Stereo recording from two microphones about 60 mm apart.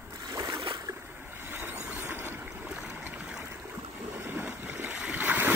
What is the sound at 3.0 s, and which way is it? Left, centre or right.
Stream, right.